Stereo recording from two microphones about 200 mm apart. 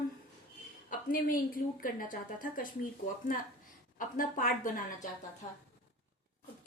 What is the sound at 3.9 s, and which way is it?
A woman's voice, 45° left (ahead or behind).